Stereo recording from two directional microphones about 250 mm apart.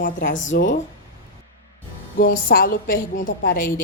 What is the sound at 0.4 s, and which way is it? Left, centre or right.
Speech, left.